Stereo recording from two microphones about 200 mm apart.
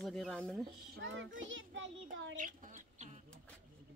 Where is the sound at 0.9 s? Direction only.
70° right (ahead or behind).